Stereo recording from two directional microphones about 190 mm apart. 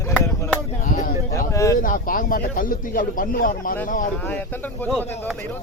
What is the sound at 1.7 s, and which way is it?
A man's voice, 45° left (ahead or behind).